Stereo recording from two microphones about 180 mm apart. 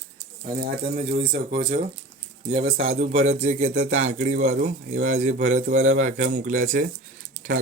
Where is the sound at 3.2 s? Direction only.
35° right (ahead or behind).